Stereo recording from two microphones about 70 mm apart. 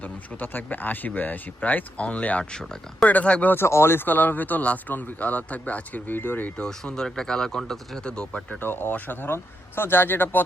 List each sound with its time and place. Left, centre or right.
0.0 s speech: left
3.5 s speech: left
6.6 s speech: centre; by 10.4 s left